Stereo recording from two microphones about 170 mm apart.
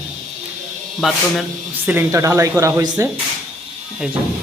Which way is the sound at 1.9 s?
15° right (ahead or behind).